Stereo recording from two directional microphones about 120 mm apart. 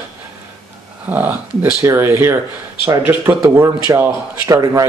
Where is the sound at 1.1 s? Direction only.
15° right (ahead or behind).